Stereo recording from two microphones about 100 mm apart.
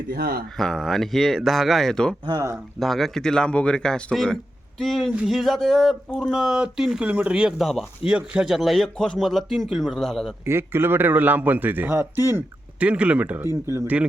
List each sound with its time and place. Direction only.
0.5 s a man's voice: 5° left (ahead or behind)
10.4 s a man's voice: 25° right (ahead or behind)
12.8 s speech: 15° right (ahead or behind)